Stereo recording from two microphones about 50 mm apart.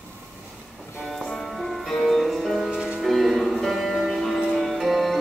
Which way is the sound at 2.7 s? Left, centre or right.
Centre.